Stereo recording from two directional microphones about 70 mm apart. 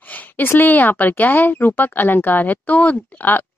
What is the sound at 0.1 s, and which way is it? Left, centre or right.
Speech, left.